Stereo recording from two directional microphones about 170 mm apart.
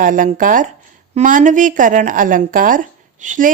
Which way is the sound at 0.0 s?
50° right (ahead or behind).